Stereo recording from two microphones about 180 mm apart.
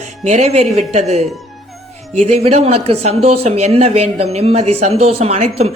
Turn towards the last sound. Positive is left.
turn(degrees=-35)  # may be behind; listen again after turning